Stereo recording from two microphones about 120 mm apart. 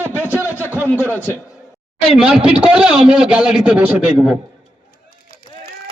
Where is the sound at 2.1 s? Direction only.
5° right (ahead or behind).